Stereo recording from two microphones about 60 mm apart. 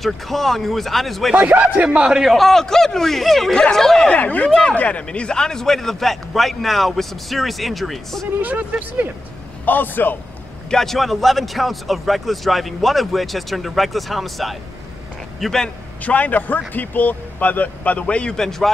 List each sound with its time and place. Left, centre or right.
0.0 s a man's voice: centre
1.3 s speech: right
2.0 s a man's voice: centre
2.3 s a man's voice: centre
4.1 s a man's voice: left; by 8.3 s centre
8.4 s speech: right
9.7 s a man's voice: left
10.7 s a man's voice: centre
16.0 s a man's voice: left; by 18.7 s centre